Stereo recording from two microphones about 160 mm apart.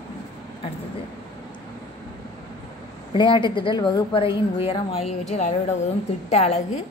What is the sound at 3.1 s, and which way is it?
A woman's voice, 30° left (ahead or behind).